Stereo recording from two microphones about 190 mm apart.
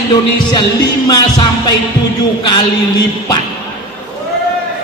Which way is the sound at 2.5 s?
20° left (ahead or behind).